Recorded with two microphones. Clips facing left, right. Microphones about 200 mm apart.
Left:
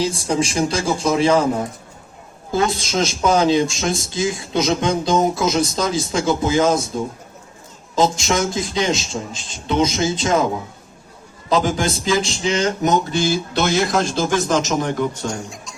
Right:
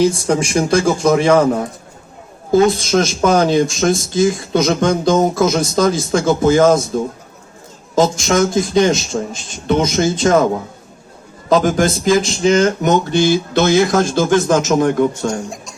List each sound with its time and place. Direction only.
0.0 s speech: 55° right (ahead or behind)
2.5 s speech: 55° right (ahead or behind)
7.9 s speech: 50° right (ahead or behind)
11.4 s speech: 45° right (ahead or behind)